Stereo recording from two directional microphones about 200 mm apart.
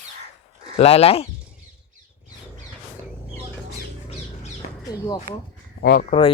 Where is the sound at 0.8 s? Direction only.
30° left (ahead or behind).